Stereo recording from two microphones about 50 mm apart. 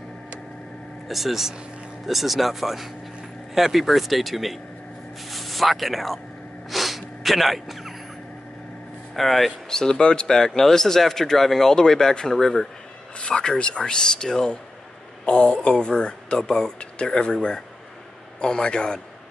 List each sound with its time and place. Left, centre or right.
1.0 s speech: centre
6.7 s snort: centre
9.1 s speech: centre
9.7 s speech: centre
13.2 s speech: centre